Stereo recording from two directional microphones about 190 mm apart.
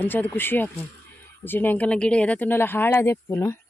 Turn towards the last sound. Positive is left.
turn(degrees=15)  # may be behind; listen again after turning